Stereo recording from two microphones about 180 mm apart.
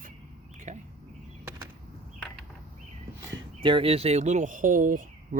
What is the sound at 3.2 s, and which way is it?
Speech, 20° right (ahead or behind).